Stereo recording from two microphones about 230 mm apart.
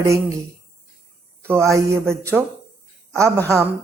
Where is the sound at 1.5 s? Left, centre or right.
Centre.